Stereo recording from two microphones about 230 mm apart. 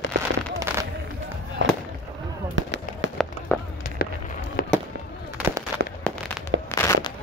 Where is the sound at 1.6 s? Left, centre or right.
Right.